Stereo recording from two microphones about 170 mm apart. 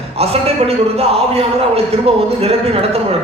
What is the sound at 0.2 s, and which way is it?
A man's voice, 35° right (ahead or behind).